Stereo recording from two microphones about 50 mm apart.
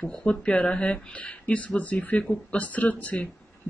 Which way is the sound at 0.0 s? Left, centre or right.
Left.